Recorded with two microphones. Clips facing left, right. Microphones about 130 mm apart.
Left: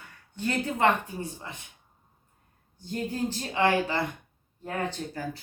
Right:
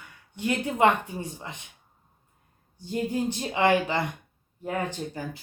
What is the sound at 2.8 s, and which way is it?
A woman's voice, 15° right (ahead or behind).